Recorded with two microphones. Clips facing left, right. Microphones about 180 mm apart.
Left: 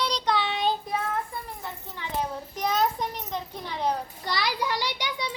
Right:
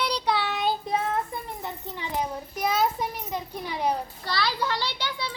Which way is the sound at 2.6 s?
10° right (ahead or behind).